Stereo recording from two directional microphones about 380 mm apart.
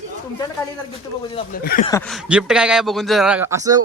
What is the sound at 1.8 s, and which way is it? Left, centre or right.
A man's voice, centre.